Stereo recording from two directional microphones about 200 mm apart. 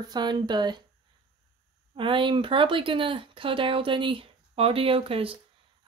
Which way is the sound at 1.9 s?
25° right (ahead or behind).